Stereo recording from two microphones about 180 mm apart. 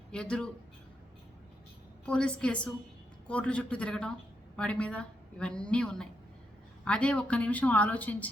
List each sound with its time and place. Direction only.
0.1 s a woman's voice: 5° left (ahead or behind)
2.0 s a woman's voice: 5° left (ahead or behind)